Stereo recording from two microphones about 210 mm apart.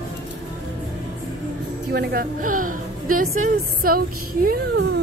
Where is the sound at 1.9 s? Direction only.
45° right (ahead or behind).